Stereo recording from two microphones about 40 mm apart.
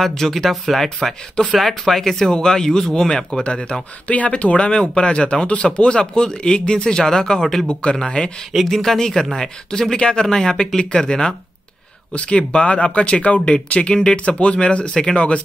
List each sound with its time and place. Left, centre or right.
0.0 s speech: centre; by 3.7 s left
4.1 s speech: left; by 7.6 s centre
7.6 s speech: left
8.6 s speech: centre
12.1 s speech: left